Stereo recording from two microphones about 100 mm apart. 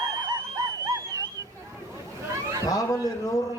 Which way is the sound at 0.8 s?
35° right (ahead or behind).